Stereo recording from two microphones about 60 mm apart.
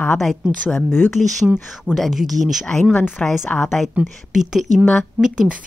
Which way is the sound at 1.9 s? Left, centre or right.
Centre.